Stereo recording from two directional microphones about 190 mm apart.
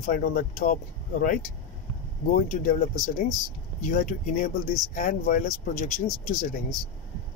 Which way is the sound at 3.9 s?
40° left (ahead or behind).